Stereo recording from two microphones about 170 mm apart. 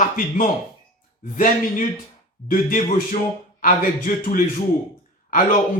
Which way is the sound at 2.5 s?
50° left (ahead or behind).